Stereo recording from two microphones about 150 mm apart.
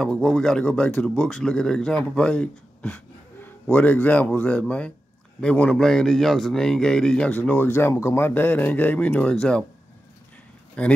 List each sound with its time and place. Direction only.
0.0 s speech: 5° left (ahead or behind)
10.8 s speech: 5° left (ahead or behind)